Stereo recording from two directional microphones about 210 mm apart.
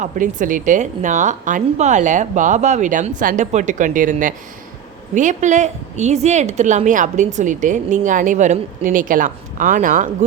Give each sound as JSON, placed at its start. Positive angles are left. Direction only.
{"t": 0.0, "sound": "speech", "side_deg": -40}